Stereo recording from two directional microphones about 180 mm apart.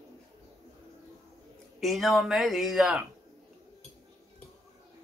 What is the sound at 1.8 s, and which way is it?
Speech, centre (ahead or behind).